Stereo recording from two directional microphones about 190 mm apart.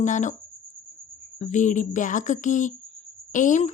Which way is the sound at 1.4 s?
40° left (ahead or behind).